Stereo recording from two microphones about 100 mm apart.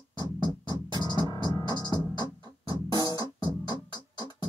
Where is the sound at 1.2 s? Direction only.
45° left (ahead or behind).